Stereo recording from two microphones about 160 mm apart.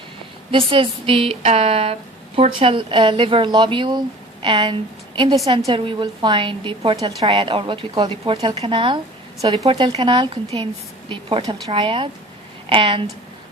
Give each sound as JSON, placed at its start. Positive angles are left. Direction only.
{"t": 0.5, "sound": "a woman's voice", "side_deg": -35}